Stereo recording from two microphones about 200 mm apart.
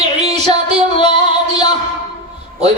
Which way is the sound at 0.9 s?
25° left (ahead or behind).